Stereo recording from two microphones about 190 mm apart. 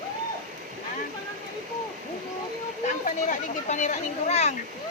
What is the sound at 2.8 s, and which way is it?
Speech, 45° left (ahead or behind).